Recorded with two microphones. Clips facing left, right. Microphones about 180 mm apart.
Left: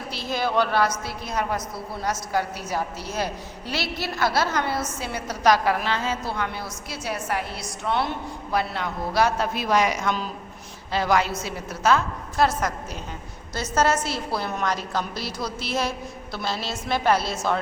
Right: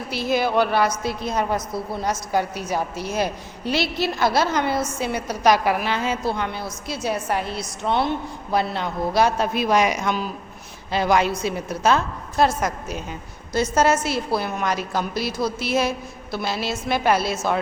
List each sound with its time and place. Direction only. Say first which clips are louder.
0.2 s a woman's voice: right 4 dB; 10° right (ahead or behind)
12.5 s a woman's voice: right 2 dB; 10° right (ahead or behind)